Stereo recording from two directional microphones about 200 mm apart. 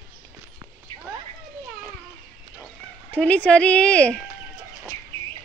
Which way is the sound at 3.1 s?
5° left (ahead or behind).